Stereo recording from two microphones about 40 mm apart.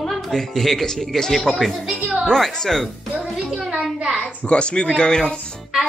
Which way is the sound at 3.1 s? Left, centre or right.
Right.